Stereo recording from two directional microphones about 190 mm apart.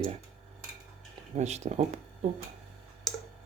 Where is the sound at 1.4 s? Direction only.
35° right (ahead or behind).